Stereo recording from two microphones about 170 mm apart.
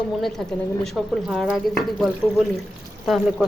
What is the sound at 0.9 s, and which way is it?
Speech, centre (ahead or behind).